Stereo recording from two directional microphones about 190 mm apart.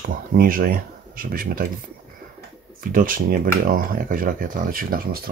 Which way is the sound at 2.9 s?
45° right (ahead or behind).